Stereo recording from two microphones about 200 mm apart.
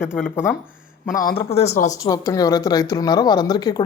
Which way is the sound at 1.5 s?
35° left (ahead or behind).